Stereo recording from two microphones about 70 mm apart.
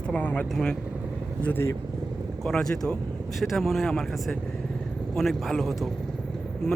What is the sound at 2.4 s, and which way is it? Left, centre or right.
Speech, centre.